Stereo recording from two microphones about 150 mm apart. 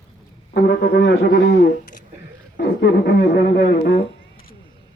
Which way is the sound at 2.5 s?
90° left.